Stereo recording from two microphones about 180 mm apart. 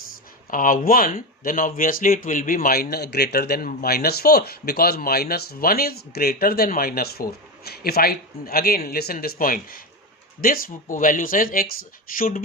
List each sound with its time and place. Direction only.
0.5 s speech: 50° left (ahead or behind)
2.9 s speech: 65° left (ahead or behind)